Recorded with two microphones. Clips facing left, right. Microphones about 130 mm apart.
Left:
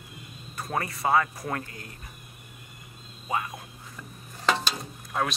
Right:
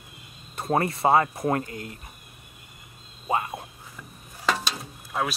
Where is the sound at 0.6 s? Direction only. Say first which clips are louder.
Right 7 dB; 30° right (ahead or behind).